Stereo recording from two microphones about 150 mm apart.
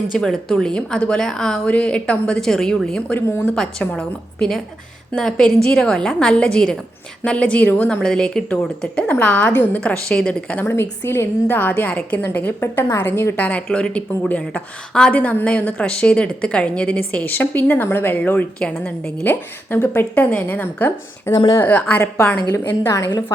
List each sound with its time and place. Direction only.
0.2 s a woman's voice: 5° left (ahead or behind); by 23.2 s 20° left (ahead or behind)